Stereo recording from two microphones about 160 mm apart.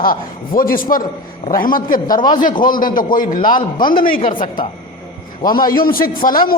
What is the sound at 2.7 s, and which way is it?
Speech, 60° left (ahead or behind).